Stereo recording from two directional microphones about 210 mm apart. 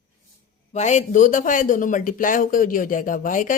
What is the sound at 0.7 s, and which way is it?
Speech, 35° left (ahead or behind).